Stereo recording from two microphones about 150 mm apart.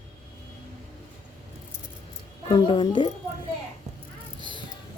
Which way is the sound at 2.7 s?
35° left (ahead or behind).